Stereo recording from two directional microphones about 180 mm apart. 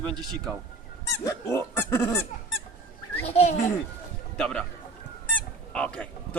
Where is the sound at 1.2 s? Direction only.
15° left (ahead or behind).